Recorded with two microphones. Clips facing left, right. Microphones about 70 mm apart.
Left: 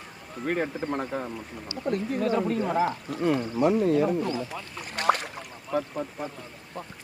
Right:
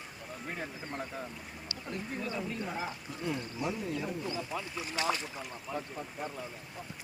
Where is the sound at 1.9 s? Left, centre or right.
Left.